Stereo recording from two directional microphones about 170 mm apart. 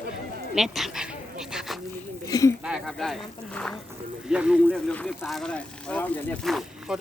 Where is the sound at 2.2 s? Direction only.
20° left (ahead or behind).